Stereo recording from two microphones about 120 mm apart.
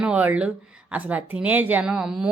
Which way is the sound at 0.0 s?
10° right (ahead or behind).